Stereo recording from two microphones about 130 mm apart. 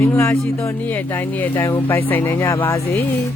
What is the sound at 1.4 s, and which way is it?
Speech, 15° left (ahead or behind).